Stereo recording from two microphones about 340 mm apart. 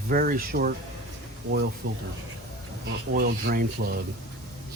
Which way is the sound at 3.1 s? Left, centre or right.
Right.